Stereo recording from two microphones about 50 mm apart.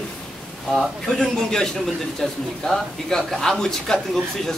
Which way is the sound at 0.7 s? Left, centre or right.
Centre.